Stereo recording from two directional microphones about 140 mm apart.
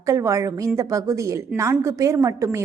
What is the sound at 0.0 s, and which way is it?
A woman's voice, 20° right (ahead or behind).